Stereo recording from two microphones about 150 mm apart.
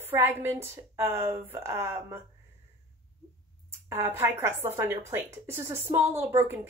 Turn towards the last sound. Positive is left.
turn(degrees=-15)  # may be behind; listen again after turning